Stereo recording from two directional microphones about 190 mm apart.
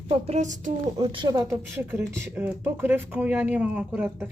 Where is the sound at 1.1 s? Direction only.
20° right (ahead or behind).